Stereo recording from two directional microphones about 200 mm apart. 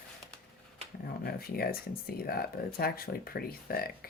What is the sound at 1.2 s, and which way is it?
Speech, 50° left (ahead or behind).